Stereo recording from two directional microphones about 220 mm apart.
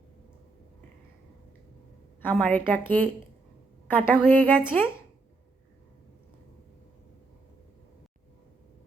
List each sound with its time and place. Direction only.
2.2 s a woman's voice: 5° left (ahead or behind)